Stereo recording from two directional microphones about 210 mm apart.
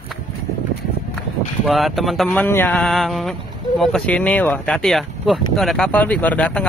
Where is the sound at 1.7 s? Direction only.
Centre (ahead or behind).